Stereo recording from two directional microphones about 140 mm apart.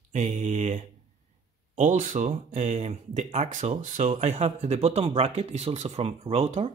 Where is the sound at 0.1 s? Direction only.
60° right (ahead or behind).